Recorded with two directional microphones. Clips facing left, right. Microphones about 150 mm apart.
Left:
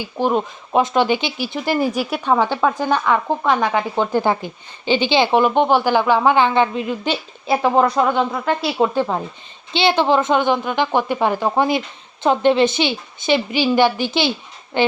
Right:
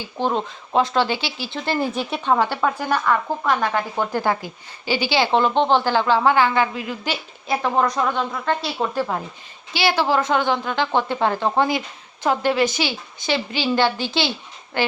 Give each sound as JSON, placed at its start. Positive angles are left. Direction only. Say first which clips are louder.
{"t": 0.0, "sound": "speech", "louder": "left 4 dB", "side_deg": 15}
{"t": 2.4, "sound": "speech", "louder": "left 3 dB", "side_deg": 15}
{"t": 3.8, "sound": "a woman's voice", "louder": "left 4 dB", "side_deg": 20}
{"t": 8.8, "sound": "speech", "louder": "left 7 dB", "side_deg": 45}
{"t": 9.7, "sound": "a woman's voice", "louder": "left 4 dB", "side_deg": 20}